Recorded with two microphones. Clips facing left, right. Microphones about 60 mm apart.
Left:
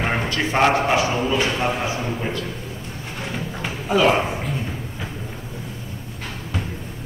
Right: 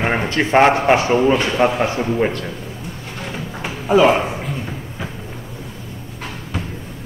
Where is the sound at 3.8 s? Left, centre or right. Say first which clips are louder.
Right 5 dB; centre.